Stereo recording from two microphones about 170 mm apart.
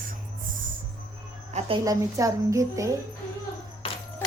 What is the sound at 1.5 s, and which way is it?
Music, 45° right (ahead or behind).